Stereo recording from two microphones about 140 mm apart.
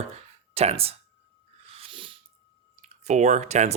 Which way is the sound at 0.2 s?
50° right (ahead or behind).